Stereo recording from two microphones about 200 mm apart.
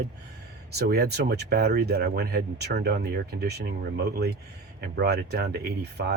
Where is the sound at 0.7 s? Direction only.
55° right (ahead or behind).